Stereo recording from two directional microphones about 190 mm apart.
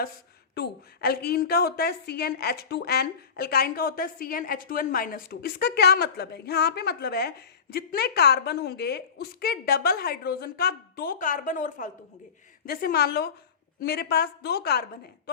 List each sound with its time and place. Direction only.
0.5 s a woman's voice: 55° left (ahead or behind)